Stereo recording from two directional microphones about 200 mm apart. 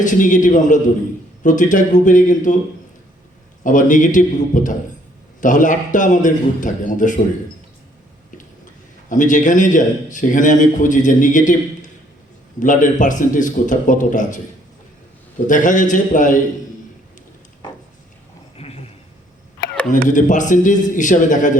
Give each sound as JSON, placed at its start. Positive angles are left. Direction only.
{"t": 0.0, "sound": "a man's voice", "side_deg": 40}
{"t": 3.6, "sound": "a man's voice", "side_deg": 40}
{"t": 9.0, "sound": "a man's voice", "side_deg": 40}
{"t": 15.4, "sound": "a man's voice", "side_deg": 40}
{"t": 18.5, "sound": "a sound", "side_deg": 30}
{"t": 20.1, "sound": "a man's voice", "side_deg": 40}